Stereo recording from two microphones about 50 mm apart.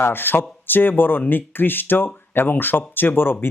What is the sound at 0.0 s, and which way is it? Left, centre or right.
Speech, left.